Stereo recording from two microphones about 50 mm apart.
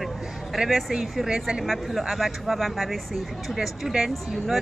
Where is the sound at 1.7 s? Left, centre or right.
Centre.